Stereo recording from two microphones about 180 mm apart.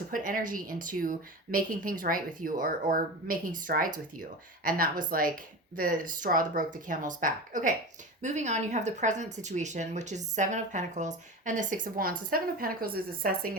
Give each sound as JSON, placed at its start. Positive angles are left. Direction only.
{"t": 0.1, "sound": "speech", "side_deg": -50}